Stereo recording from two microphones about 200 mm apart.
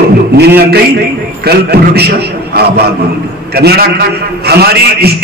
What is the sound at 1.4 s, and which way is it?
A man's voice, 55° right (ahead or behind).